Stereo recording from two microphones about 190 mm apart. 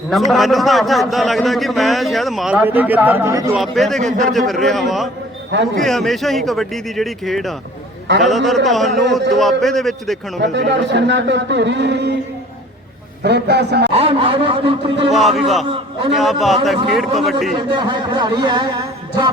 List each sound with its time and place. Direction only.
0.1 s a man's voice: centre (ahead or behind)
3.5 s a man's voice: centre (ahead or behind)
10.4 s speech: 65° right (ahead or behind)
13.2 s a man's voice: 60° right (ahead or behind)
13.9 s a man's voice: 30° right (ahead or behind)
15.1 s a man's voice: centre (ahead or behind)
17.7 s a man's voice: 20° right (ahead or behind)